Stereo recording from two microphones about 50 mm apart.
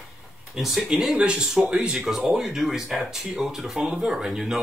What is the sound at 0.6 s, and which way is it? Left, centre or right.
Speech, centre.